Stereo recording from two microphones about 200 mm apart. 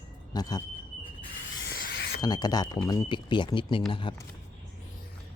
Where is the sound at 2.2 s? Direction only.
20° left (ahead or behind).